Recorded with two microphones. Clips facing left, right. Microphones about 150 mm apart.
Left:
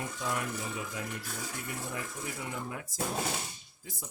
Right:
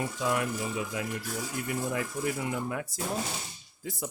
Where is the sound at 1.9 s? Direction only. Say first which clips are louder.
Right 8 dB; 70° right (ahead or behind).